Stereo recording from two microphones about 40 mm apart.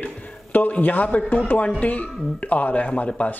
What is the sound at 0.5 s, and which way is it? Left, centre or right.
A man's voice, left.